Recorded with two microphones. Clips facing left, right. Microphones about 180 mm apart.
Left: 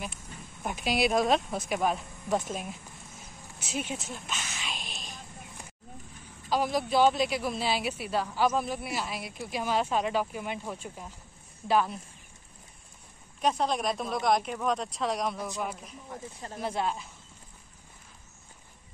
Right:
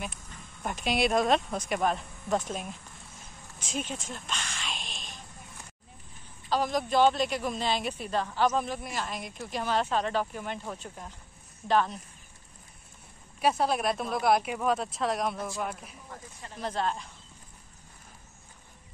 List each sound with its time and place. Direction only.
0.0 s speech: 5° left (ahead or behind)
4.1 s a sound: 5° left (ahead or behind)
4.8 s a sound: 45° left (ahead or behind)
6.5 s speech: 10° left (ahead or behind)
13.4 s speech: 5° right (ahead or behind)
16.6 s speech: 10° left (ahead or behind)